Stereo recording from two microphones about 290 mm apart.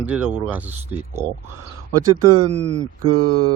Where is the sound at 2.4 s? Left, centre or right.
Right.